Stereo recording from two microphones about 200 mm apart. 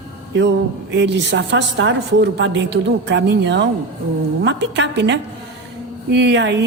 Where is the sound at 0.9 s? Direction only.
60° right (ahead or behind).